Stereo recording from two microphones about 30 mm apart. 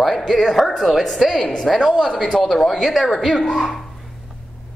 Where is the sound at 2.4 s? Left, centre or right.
Centre.